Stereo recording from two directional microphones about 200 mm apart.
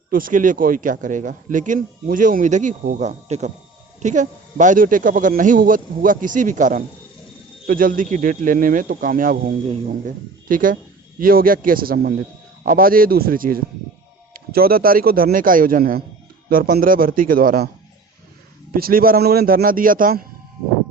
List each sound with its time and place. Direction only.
0.1 s speech: 45° right (ahead or behind)
10.5 s speech: 45° right (ahead or behind)
18.7 s speech: 45° right (ahead or behind)